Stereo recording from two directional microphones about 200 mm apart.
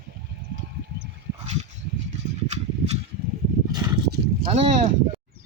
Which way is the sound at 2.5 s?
35° right (ahead or behind).